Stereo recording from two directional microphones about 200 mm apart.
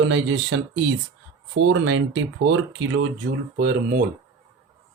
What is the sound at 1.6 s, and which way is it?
Speech, 70° right (ahead or behind).